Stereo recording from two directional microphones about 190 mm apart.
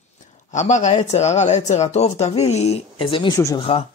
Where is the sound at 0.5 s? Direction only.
40° left (ahead or behind); by 3.6 s 20° left (ahead or behind).